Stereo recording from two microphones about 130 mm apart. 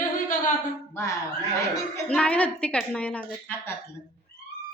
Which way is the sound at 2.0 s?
10° left (ahead or behind).